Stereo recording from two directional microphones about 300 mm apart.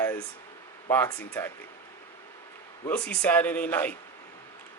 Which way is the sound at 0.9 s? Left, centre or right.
Centre.